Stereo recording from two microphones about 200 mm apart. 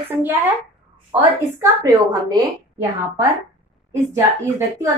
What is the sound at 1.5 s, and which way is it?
A woman's voice, 15° right (ahead or behind).